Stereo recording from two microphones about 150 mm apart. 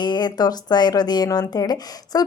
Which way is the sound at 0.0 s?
30° left (ahead or behind).